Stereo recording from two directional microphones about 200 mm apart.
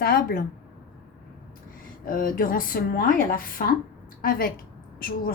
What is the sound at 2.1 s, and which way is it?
A woman's voice, 45° left (ahead or behind).